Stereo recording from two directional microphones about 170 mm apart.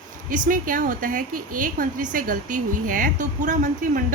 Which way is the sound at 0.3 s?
50° right (ahead or behind).